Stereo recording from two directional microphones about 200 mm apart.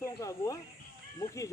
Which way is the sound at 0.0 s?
15° left (ahead or behind).